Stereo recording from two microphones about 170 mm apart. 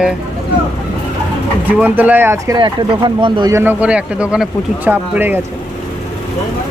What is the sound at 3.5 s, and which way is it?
Speech, 15° right (ahead or behind).